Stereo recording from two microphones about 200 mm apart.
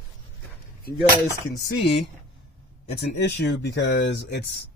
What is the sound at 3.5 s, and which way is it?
Speech, 60° left (ahead or behind).